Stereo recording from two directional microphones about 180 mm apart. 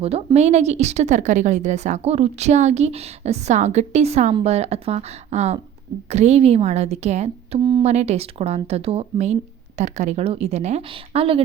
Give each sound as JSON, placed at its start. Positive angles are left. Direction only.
{"t": 0.0, "sound": "speech", "side_deg": -35}
{"t": 7.6, "sound": "speech", "side_deg": -25}
{"t": 7.9, "sound": "speech", "side_deg": -35}